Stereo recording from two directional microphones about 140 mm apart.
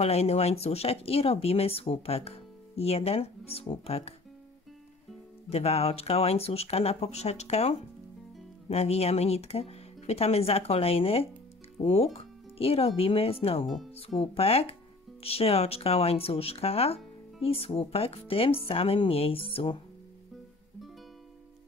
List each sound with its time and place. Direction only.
0.0 s speech: 50° left (ahead or behind)
5.5 s speech: 45° left (ahead or behind)